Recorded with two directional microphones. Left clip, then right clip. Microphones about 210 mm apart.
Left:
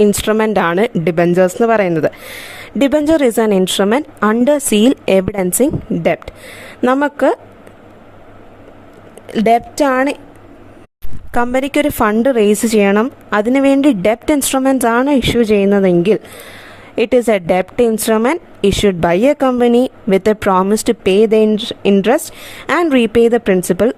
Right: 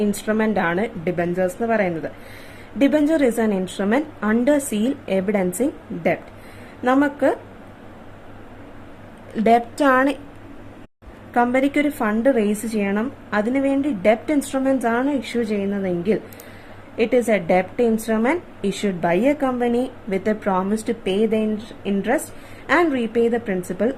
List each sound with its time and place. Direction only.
0.0 s a woman's voice: 55° left (ahead or behind)
9.3 s a woman's voice: 40° left (ahead or behind)
11.3 s a woman's voice: 55° left (ahead or behind)